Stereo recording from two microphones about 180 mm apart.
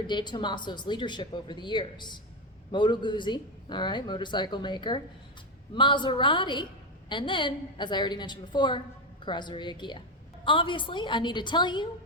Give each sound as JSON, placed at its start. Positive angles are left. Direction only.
{"t": 0.1, "sound": "speech", "side_deg": 25}